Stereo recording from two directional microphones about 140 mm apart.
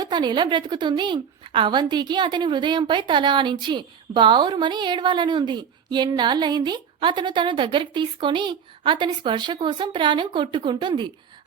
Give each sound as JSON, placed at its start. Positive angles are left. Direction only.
{"t": 0.0, "sound": "a woman's voice", "side_deg": -30}